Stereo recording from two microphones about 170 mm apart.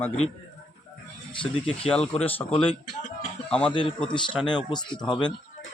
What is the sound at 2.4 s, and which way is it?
Speech, 30° left (ahead or behind).